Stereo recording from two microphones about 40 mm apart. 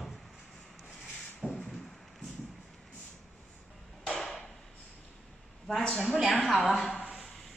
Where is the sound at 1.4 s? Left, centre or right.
Centre.